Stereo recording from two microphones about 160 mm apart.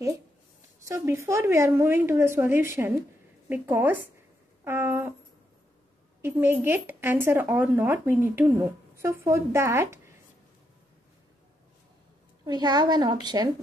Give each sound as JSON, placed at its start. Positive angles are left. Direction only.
{"t": 0.8, "sound": "speech", "side_deg": -20}
{"t": 6.2, "sound": "speech", "side_deg": -15}
{"t": 12.4, "sound": "a woman's voice", "side_deg": -25}